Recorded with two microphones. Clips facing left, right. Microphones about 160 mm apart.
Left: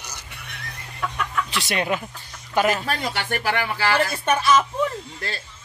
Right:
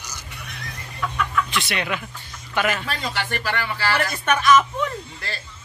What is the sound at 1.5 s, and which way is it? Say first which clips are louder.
Speech: left 2 dB; 40° left (ahead or behind).